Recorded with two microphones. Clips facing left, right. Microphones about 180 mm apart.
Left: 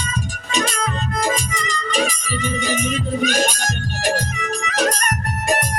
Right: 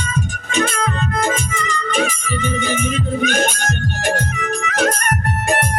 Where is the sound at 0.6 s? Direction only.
55° right (ahead or behind).